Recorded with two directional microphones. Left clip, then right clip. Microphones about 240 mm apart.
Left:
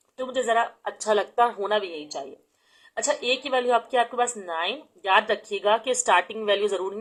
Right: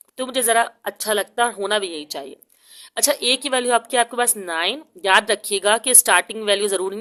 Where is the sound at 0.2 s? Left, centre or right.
Right.